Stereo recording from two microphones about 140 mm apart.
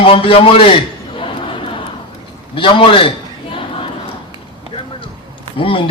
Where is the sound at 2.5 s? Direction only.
40° left (ahead or behind).